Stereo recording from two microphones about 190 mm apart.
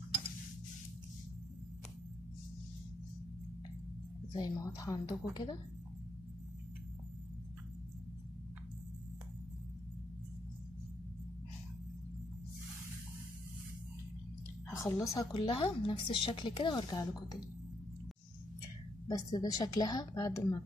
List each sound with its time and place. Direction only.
4.3 s a woman's voice: 20° left (ahead or behind)
14.7 s a woman's voice: 15° left (ahead or behind)
15.3 s a woman's voice: 30° left (ahead or behind)
19.0 s a woman's voice: 20° left (ahead or behind)